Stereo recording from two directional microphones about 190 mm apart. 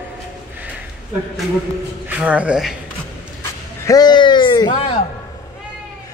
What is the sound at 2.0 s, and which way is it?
Speech, 5° right (ahead or behind).